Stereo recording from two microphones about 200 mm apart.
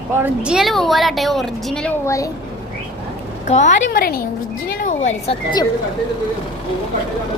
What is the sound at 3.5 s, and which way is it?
Speech, 35° left (ahead or behind).